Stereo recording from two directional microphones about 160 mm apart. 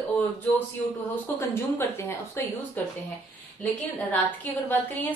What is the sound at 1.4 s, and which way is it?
A woman's voice, 15° left (ahead or behind).